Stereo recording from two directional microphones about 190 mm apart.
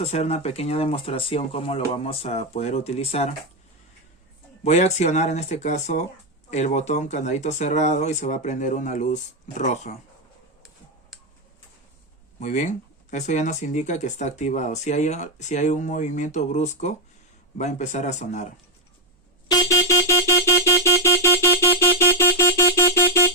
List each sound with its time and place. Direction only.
0.0 s speech: 35° left (ahead or behind)
4.6 s speech: 35° left (ahead or behind)
12.4 s speech: 40° left (ahead or behind)
19.5 s vehicle: 15° left (ahead or behind)